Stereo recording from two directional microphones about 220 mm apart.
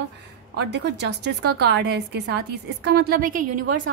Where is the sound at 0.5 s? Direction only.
50° right (ahead or behind).